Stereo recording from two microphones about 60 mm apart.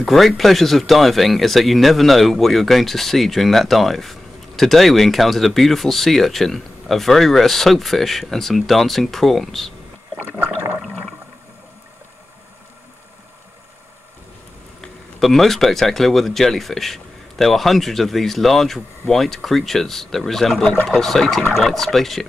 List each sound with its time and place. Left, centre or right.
0.0 s speech: centre
14.8 s speech: centre
20.6 s speech: left
21.0 s speech: centre